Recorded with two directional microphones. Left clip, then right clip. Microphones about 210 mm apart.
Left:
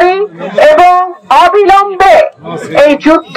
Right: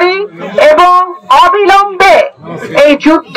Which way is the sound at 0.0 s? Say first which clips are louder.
Left 2 dB; 25° right (ahead or behind).